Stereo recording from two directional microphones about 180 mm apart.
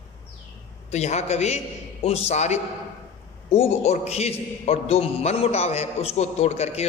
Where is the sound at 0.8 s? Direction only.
40° left (ahead or behind).